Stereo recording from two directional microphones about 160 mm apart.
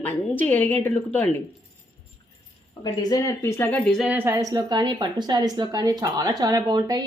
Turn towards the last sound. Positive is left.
turn(degrees=-25)  # may be behind; listen again after turning